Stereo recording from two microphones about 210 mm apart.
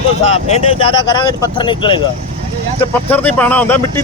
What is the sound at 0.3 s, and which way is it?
Speech, 30° left (ahead or behind).